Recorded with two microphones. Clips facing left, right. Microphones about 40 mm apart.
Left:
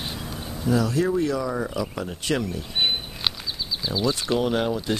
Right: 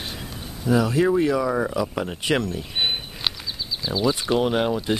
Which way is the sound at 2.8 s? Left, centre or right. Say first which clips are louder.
Left 1 dB; centre.